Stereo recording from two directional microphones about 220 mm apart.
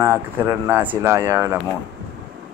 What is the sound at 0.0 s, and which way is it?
Speech, 10° right (ahead or behind).